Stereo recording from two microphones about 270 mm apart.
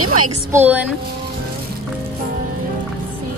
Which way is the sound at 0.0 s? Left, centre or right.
Right.